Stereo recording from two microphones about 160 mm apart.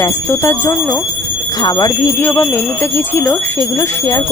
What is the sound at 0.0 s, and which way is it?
Speech, 15° left (ahead or behind).